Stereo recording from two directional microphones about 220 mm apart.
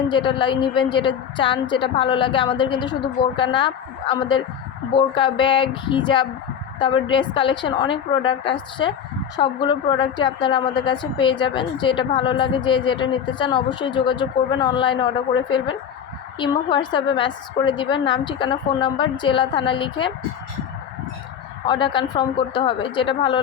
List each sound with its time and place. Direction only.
0.1 s a woman's voice: 20° left (ahead or behind)
21.7 s a woman's voice: 20° left (ahead or behind)